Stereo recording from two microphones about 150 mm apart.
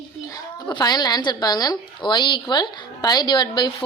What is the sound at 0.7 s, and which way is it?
A woman's voice, 30° left (ahead or behind).